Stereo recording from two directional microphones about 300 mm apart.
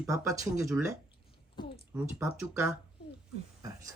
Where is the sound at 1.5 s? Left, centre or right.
Centre.